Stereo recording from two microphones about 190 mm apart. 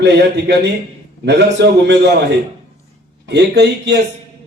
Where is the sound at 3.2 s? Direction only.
65° right (ahead or behind).